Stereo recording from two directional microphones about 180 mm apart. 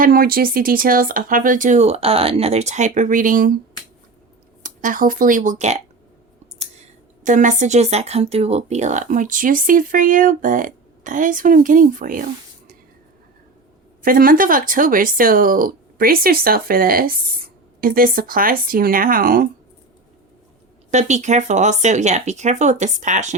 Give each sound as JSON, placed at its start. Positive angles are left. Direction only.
{"t": 0.0, "sound": "speech", "side_deg": -55}
{"t": 4.6, "sound": "speech", "side_deg": -45}
{"t": 7.3, "sound": "speech", "side_deg": -45}
{"t": 14.0, "sound": "speech", "side_deg": -50}
{"t": 20.9, "sound": "speech", "side_deg": -40}